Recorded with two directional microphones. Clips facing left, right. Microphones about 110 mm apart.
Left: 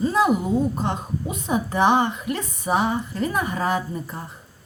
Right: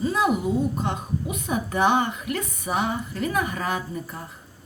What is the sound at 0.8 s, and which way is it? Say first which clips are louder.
A woman's voice: left 1 dB; 30° left (ahead or behind).